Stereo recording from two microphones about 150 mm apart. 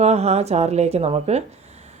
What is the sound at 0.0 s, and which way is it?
Speech, 45° right (ahead or behind).